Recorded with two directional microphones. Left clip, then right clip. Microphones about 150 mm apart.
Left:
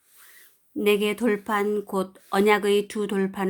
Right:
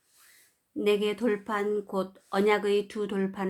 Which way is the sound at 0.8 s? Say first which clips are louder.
Left 4 dB; 30° left (ahead or behind).